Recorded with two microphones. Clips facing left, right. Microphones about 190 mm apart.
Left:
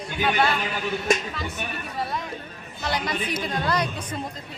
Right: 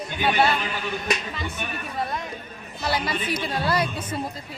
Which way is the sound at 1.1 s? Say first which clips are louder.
Left 5 dB; 45° left (ahead or behind).